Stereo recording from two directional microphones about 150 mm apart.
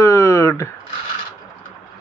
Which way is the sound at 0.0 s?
20° left (ahead or behind).